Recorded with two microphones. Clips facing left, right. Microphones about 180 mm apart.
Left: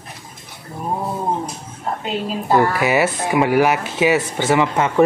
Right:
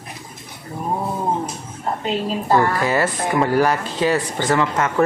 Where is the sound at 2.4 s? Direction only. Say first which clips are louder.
Left 2 dB; 10° left (ahead or behind).